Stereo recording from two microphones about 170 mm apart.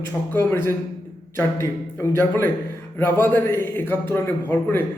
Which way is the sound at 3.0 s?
10° left (ahead or behind).